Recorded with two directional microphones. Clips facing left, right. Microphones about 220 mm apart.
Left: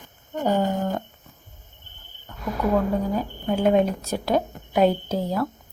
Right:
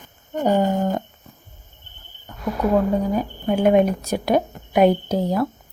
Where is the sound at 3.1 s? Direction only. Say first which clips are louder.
Right 3 dB; 15° right (ahead or behind).